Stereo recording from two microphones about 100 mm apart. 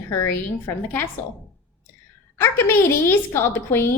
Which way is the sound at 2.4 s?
25° left (ahead or behind).